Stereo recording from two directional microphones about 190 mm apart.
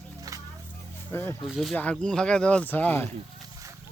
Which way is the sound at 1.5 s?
Centre (ahead or behind).